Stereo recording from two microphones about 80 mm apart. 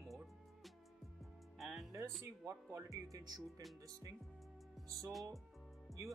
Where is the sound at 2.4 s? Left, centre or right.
Right.